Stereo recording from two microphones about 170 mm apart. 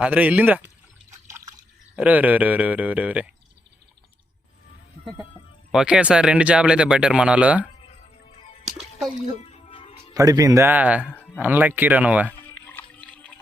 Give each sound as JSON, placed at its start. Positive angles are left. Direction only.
{"t": 0.0, "sound": "speech", "side_deg": -10}
{"t": 2.0, "sound": "speech", "side_deg": -10}
{"t": 5.7, "sound": "speech", "side_deg": -5}
{"t": 8.2, "sound": "music", "side_deg": 40}
{"t": 10.2, "sound": "speech", "side_deg": -20}
{"t": 11.1, "sound": "a sound", "side_deg": 10}
{"t": 11.3, "sound": "speech", "side_deg": -10}
{"t": 12.5, "sound": "a sound", "side_deg": 10}
{"t": 13.1, "sound": "water", "side_deg": 5}